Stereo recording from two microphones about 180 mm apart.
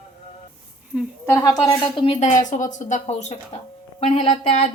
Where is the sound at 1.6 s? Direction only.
25° left (ahead or behind).